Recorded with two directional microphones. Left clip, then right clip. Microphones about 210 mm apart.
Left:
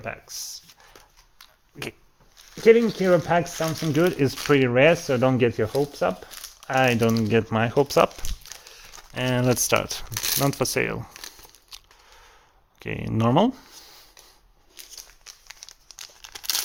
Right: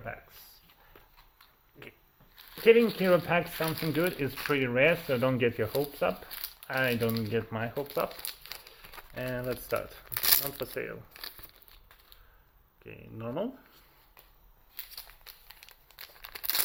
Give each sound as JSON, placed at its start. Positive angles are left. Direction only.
{"t": 0.0, "sound": "speech", "side_deg": 55}
{"t": 2.6, "sound": "speech", "side_deg": 30}
{"t": 6.7, "sound": "speech", "side_deg": 55}
{"t": 9.1, "sound": "speech", "side_deg": 50}
{"t": 10.1, "sound": "speech", "side_deg": -10}
{"t": 10.4, "sound": "speech", "side_deg": 55}
{"t": 12.8, "sound": "speech", "side_deg": 55}
{"t": 15.3, "sound": "crumpling", "side_deg": -5}